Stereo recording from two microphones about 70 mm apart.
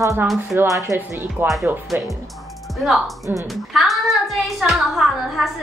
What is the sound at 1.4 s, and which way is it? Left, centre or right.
Speech, right.